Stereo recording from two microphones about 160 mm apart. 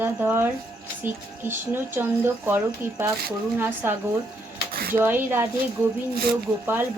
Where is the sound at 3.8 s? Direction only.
15° right (ahead or behind).